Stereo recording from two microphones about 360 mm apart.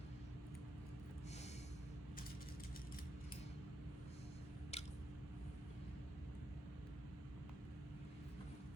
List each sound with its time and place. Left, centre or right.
4.7 s squish: centre